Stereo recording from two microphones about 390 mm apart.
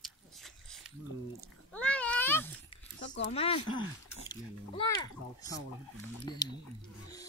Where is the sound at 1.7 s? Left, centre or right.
Centre.